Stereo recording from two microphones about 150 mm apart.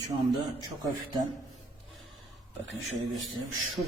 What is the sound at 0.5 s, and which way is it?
Speech, 25° right (ahead or behind).